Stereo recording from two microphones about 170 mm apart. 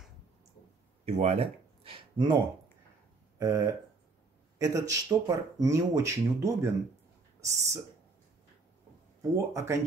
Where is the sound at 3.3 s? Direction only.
20° right (ahead or behind).